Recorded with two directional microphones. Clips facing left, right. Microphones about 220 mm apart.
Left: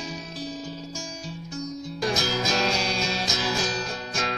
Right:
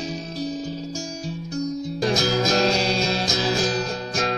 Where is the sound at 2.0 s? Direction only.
40° right (ahead or behind).